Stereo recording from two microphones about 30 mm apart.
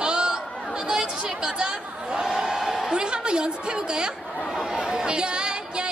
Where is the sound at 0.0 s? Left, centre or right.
Right.